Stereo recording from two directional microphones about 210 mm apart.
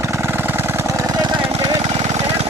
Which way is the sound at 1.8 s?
30° right (ahead or behind).